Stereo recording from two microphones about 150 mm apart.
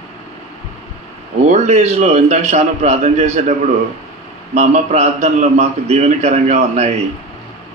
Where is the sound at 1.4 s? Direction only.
45° right (ahead or behind).